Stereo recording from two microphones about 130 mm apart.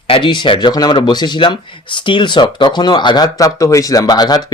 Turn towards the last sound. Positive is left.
turn(degrees=30)  # may be behind; listen again after turning